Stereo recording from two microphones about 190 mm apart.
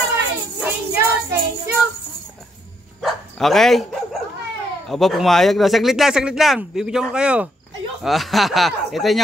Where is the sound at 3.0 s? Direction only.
Centre (ahead or behind).